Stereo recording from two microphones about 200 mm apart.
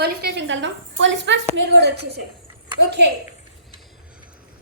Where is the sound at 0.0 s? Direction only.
55° right (ahead or behind).